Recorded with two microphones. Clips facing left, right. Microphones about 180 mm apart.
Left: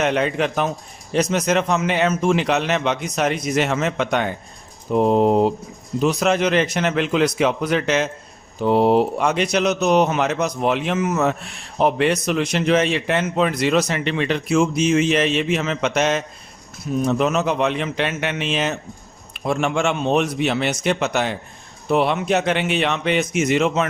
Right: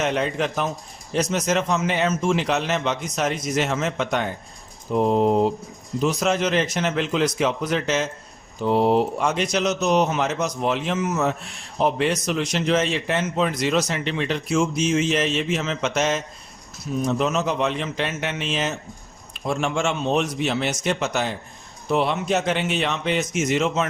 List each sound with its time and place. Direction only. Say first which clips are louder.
0.0 s a man's voice: left 3 dB; 65° left (ahead or behind)